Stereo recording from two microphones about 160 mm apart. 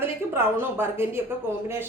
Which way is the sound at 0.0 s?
15° right (ahead or behind).